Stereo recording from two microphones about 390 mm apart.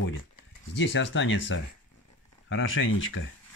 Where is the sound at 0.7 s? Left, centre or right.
Left.